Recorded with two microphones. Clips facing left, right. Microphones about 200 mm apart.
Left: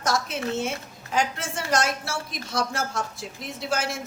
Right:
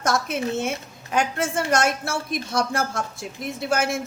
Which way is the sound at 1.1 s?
55° right (ahead or behind).